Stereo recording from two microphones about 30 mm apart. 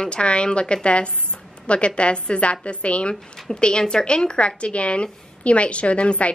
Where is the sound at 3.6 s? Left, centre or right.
Left.